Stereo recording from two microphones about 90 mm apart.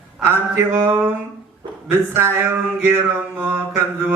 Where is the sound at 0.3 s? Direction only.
25° right (ahead or behind).